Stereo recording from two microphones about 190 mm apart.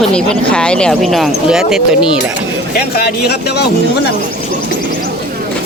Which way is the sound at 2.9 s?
55° left (ahead or behind).